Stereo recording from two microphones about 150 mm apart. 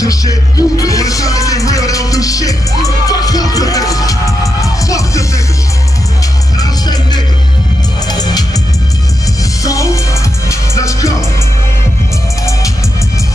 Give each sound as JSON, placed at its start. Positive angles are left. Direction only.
{"t": 0.0, "sound": "music", "side_deg": 25}
{"t": 8.1, "sound": "music", "side_deg": 25}
{"t": 9.6, "sound": "music", "side_deg": 20}